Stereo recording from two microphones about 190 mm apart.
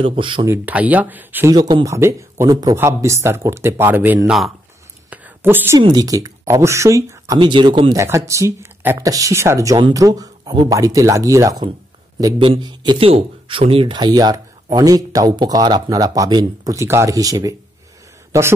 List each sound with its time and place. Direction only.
0.0 s speech: 25° right (ahead or behind)
0.5 s speech: 10° right (ahead or behind)
1.5 s speech: 20° right (ahead or behind); by 4.5 s 5° right (ahead or behind)
5.1 s whispering: 10° right (ahead or behind)
5.8 s speech: 20° right (ahead or behind)
8.3 s speech: 15° right (ahead or behind)